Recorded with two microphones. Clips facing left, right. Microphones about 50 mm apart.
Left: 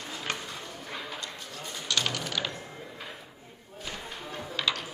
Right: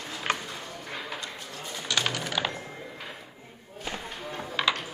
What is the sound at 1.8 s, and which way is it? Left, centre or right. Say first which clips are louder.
Music: right 2 dB; centre.